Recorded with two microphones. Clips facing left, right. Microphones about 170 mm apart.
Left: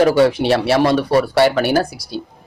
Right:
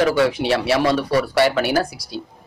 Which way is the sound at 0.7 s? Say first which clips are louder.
Left 3 dB; 55° left (ahead or behind).